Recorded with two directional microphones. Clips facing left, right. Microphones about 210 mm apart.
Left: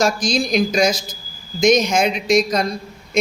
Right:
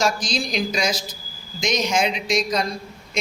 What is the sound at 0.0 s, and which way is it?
A man's voice, 45° left (ahead or behind).